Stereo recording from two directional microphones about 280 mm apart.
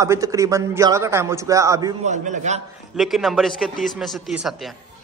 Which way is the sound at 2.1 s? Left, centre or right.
Right.